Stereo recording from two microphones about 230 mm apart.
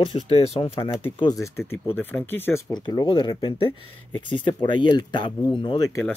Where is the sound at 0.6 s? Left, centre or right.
Left.